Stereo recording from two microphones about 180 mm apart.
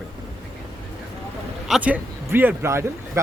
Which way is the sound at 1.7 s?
10° right (ahead or behind).